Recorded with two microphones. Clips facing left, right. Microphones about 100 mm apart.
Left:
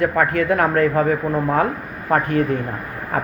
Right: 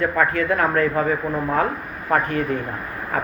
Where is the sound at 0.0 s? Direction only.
50° left (ahead or behind).